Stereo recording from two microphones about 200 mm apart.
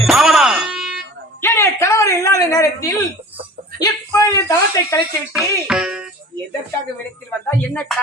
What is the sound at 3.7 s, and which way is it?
A woman's voice, 20° left (ahead or behind).